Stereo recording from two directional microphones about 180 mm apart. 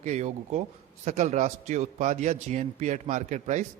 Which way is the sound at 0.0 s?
40° right (ahead or behind).